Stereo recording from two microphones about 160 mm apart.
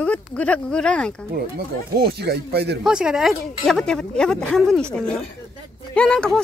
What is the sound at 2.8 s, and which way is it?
Speech, 5° right (ahead or behind).